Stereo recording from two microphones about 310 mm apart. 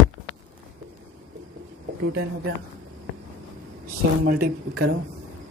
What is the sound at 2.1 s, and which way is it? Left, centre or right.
Speech, right.